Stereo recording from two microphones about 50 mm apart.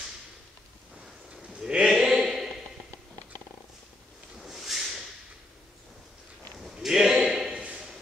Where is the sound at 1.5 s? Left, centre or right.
Centre.